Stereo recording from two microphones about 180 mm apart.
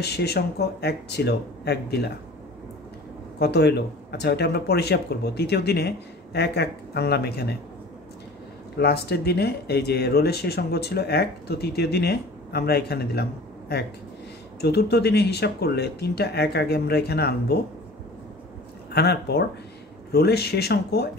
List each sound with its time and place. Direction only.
0.0 s speech: 65° left (ahead or behind)
3.3 s speech: 65° left (ahead or behind)
8.7 s speech: 65° left (ahead or behind)
18.9 s speech: 65° left (ahead or behind)